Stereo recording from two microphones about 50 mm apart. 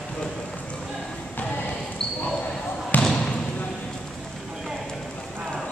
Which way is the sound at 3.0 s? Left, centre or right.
Centre.